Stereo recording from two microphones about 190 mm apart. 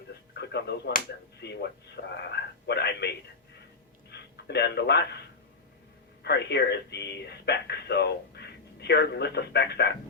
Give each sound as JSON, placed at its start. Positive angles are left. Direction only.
{"t": 0.3, "sound": "speech", "side_deg": 60}
{"t": 4.1, "sound": "a man's voice", "side_deg": 60}
{"t": 6.2, "sound": "speech", "side_deg": 60}